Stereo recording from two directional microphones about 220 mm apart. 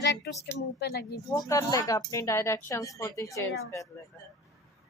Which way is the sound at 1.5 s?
15° left (ahead or behind).